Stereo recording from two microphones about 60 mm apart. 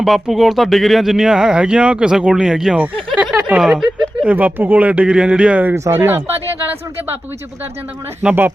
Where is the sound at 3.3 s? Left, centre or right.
Right.